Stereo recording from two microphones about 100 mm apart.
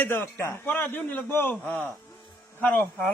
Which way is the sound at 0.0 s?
20° left (ahead or behind).